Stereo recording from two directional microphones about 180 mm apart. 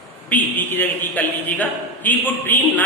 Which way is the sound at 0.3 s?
10° left (ahead or behind).